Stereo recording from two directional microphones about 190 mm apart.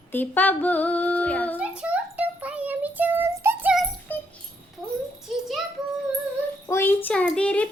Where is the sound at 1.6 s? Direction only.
5° right (ahead or behind).